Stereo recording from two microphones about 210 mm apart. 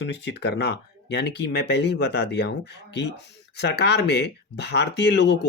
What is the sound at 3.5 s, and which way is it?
Speech, 50° left (ahead or behind).